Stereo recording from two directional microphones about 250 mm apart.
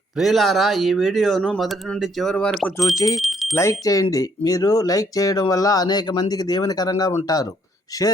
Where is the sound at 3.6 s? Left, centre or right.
Centre.